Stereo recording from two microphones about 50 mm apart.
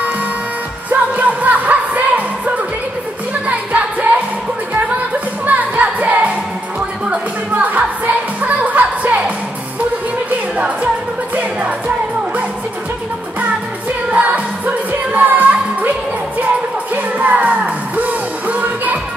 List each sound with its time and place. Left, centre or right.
0.8 s music: right
5.5 s music: right
14.1 s music of asia: right
14.9 s music: right
16.9 s music: right